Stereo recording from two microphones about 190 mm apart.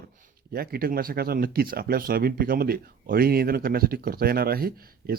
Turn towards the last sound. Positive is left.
turn(degrees=-50)  # may be behind; listen again after turning